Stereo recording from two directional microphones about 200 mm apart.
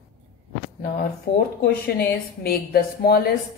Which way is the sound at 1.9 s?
50° left (ahead or behind).